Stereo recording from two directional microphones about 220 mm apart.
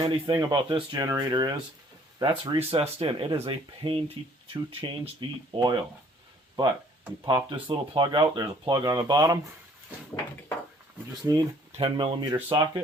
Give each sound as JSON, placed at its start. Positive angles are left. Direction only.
{"t": 0.0, "sound": "speech", "side_deg": -20}
{"t": 7.3, "sound": "speech", "side_deg": -20}
{"t": 11.3, "sound": "speech", "side_deg": -20}